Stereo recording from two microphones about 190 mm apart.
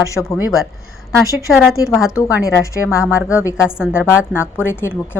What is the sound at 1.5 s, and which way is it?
Speech, centre (ahead or behind).